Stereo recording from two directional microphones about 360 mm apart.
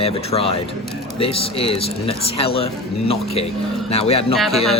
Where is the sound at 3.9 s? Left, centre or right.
Centre.